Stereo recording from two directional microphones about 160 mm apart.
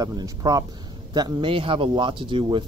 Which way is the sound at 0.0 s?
25° right (ahead or behind).